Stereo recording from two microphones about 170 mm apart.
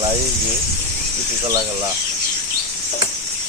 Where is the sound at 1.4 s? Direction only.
20° right (ahead or behind).